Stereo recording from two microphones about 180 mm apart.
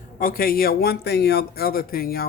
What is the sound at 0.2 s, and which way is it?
Speech, 55° left (ahead or behind).